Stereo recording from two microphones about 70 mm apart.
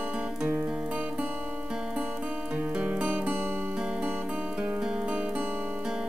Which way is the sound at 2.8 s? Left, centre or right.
Right.